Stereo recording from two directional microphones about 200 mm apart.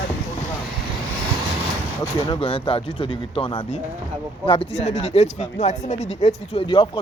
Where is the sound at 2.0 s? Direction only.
25° left (ahead or behind).